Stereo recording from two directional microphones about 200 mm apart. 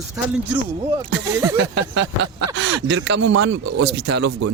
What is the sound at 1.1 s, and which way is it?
Speech, 60° right (ahead or behind).